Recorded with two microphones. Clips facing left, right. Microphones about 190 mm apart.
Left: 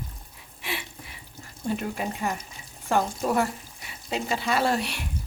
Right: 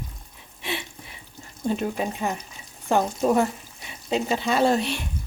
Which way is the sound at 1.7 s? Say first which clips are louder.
Right 3 dB; 20° right (ahead or behind).